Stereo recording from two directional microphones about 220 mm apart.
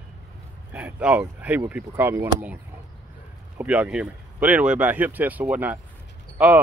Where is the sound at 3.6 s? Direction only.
5° right (ahead or behind).